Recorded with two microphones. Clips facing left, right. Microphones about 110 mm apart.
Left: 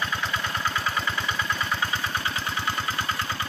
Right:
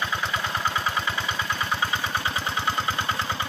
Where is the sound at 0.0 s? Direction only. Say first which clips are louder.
Right 1 dB; 15° right (ahead or behind).